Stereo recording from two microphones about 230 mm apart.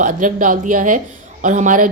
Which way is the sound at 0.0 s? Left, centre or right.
Right.